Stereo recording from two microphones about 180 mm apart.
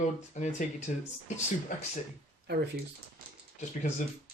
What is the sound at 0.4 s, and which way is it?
Speech, 40° left (ahead or behind).